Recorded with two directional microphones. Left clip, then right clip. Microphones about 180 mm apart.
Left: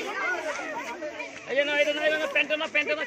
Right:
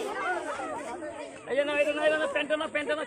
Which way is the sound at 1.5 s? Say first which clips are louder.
Left 2 dB; 15° left (ahead or behind).